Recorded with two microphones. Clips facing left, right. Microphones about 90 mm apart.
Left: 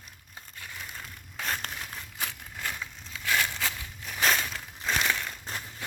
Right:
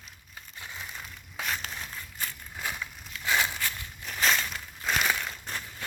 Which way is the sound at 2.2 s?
90° left.